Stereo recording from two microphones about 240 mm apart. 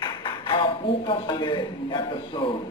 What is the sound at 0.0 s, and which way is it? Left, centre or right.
A man's voice, centre.